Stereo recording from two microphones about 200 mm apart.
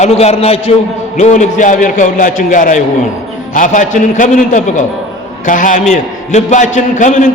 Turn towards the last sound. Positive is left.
turn(degrees=40)  # may be behind; listen again after turning